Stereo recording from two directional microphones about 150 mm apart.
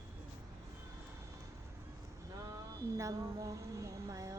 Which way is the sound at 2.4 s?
20° right (ahead or behind).